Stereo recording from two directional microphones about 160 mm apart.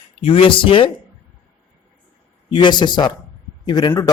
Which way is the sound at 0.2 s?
35° left (ahead or behind).